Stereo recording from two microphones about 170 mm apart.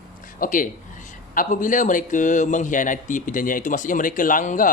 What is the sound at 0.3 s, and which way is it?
A man's voice, 50° left (ahead or behind).